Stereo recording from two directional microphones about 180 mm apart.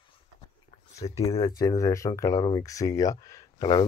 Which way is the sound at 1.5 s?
20° left (ahead or behind).